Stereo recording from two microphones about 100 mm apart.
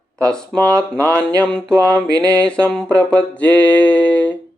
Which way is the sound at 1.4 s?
10° left (ahead or behind).